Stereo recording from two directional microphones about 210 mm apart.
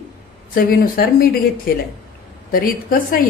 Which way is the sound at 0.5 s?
45° left (ahead or behind).